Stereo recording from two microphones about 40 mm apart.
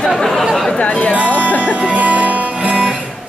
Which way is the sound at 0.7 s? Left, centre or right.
Left.